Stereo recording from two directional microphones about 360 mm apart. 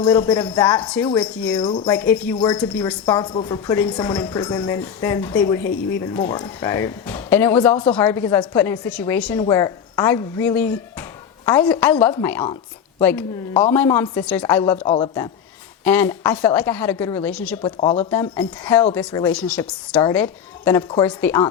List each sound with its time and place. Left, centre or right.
0.0 s a woman's voice: centre
17.7 s speech: centre
18.1 s a woman's voice: centre